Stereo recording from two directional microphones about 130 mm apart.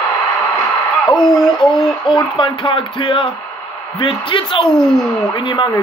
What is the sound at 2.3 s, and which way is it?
A woman's voice, 40° left (ahead or behind).